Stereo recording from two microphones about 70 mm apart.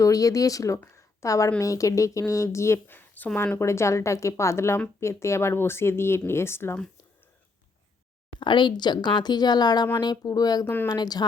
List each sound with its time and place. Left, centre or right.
0.0 s speech: left
0.9 s a sound: left
1.5 s speech: left
3.6 s speech: left
8.4 s speech: left